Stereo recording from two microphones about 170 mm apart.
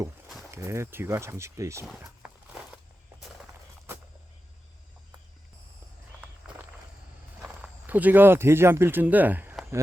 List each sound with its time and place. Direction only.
0.5 s speech: 15° right (ahead or behind)
2.2 s walk: 5° right (ahead or behind)
7.4 s speech: 5° right (ahead or behind)